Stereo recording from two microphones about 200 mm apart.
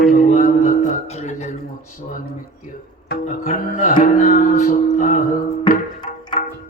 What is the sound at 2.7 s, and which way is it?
Music, 40° left (ahead or behind).